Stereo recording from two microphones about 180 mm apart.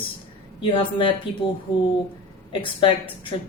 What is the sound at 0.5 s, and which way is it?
Speech, 30° left (ahead or behind).